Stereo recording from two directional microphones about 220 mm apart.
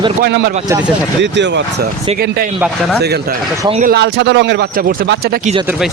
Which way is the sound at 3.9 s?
50° right (ahead or behind).